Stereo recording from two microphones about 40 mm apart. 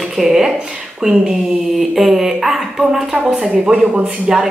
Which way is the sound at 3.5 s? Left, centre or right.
Right.